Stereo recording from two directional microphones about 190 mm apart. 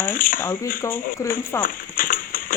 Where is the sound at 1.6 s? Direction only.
45° left (ahead or behind).